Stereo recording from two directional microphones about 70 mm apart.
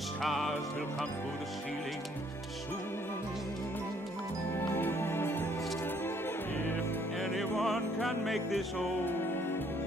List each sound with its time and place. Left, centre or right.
0.2 s music: centre
4.6 s music: left
7.2 s music: centre